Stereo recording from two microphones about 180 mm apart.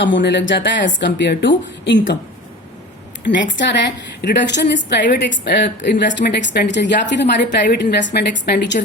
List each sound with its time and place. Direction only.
0.0 s speech: 85° left
4.2 s a woman's voice: 70° left (ahead or behind)